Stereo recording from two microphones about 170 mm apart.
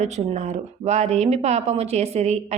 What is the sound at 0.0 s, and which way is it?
Speech, 45° right (ahead or behind).